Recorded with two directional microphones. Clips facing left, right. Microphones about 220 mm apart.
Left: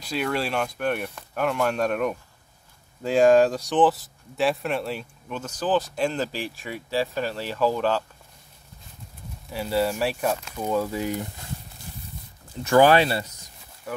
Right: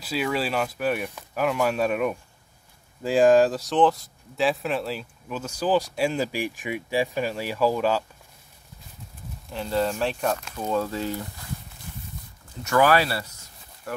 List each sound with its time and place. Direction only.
0.0 s speech: 5° right (ahead or behind)
9.5 s speech: 10° left (ahead or behind)
12.6 s speech: 30° left (ahead or behind)